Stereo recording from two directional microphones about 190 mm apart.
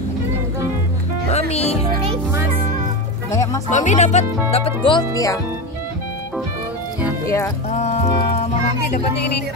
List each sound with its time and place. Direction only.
1.5 s music: 35° left (ahead or behind)
3.3 s music: 15° left (ahead or behind)
3.7 s speech: 40° left (ahead or behind); by 5.4 s 20° left (ahead or behind)
7.2 s speech: 15° left (ahead or behind)
7.7 s speech: 35° left (ahead or behind)